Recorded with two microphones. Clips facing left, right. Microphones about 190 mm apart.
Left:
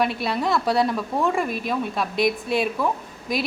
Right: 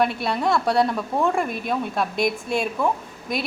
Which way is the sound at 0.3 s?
Centre (ahead or behind).